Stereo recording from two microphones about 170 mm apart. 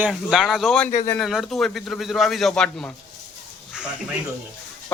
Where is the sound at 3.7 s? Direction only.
5° right (ahead or behind).